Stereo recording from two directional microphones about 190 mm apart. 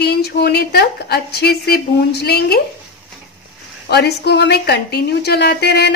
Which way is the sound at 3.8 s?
60° left (ahead or behind).